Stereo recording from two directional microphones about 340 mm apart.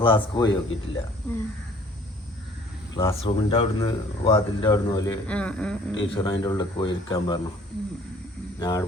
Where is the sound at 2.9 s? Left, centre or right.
Centre.